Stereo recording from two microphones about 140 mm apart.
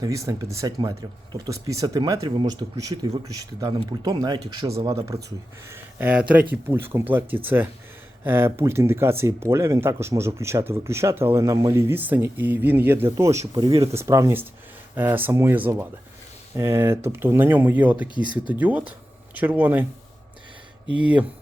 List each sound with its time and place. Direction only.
0.0 s speech: 25° right (ahead or behind)
13.6 s speech: 30° right (ahead or behind)
13.9 s speech: 20° right (ahead or behind)
21.0 s speech: 10° right (ahead or behind)